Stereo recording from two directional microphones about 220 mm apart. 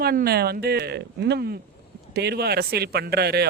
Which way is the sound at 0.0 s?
45° right (ahead or behind).